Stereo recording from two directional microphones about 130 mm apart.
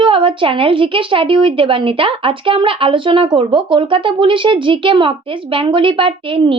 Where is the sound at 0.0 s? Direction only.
40° right (ahead or behind).